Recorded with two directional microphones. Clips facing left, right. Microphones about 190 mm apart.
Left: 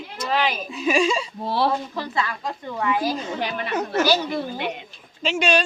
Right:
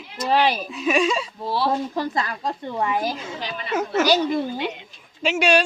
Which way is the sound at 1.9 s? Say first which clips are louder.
Right 2 dB; 40° right (ahead or behind).